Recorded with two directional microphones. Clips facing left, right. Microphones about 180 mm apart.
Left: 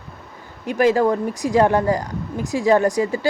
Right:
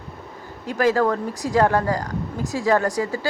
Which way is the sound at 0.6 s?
20° left (ahead or behind).